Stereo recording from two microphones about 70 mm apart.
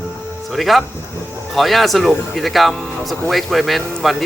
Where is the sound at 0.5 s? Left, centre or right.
Centre.